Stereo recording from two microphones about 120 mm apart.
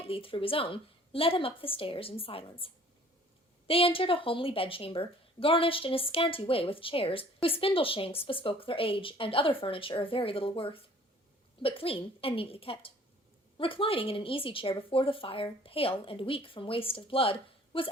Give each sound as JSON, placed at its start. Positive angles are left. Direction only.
{"t": 0.1, "sound": "a woman's voice", "side_deg": 50}
{"t": 3.7, "sound": "a woman's voice", "side_deg": 50}